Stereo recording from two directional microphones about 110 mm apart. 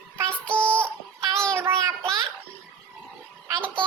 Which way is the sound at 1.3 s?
5° left (ahead or behind).